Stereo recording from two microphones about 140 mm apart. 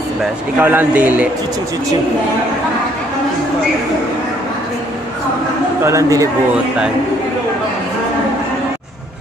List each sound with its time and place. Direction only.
0.6 s speech: 15° right (ahead or behind)
5.9 s speech: 25° right (ahead or behind)